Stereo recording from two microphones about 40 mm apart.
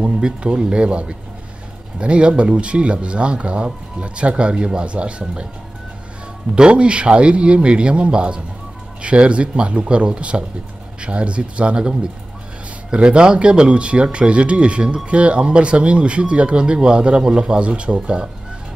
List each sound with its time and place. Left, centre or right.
0.2 s speech: right
6.5 s speech: right
12.9 s speech: right